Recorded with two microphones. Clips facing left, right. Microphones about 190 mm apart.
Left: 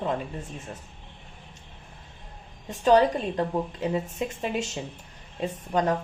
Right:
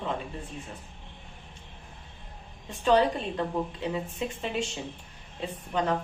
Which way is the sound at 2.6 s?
40° left (ahead or behind).